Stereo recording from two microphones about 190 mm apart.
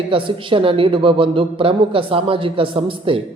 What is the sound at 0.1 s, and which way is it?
Speech, 25° right (ahead or behind).